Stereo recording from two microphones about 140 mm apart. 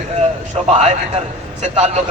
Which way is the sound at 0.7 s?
55° right (ahead or behind).